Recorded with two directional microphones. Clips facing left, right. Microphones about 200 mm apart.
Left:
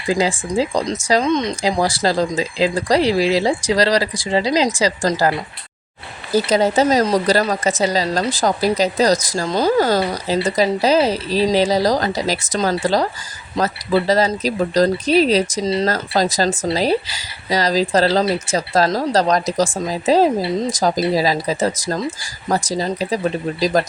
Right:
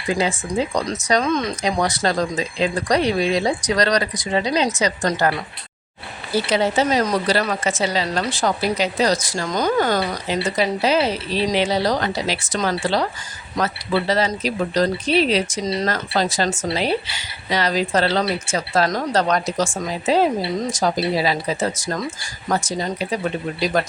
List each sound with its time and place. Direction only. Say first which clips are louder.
0.1 s speech: left 3 dB; 30° left (ahead or behind)
6.3 s speech: left 4 dB; 40° left (ahead or behind)